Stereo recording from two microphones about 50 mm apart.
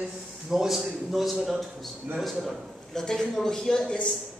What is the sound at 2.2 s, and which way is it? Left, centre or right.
A man's voice, centre.